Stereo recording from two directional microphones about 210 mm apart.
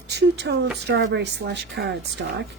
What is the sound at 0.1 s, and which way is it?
A woman's voice, 55° right (ahead or behind).